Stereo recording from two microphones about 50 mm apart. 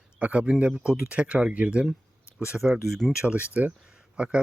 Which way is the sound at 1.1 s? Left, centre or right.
Right.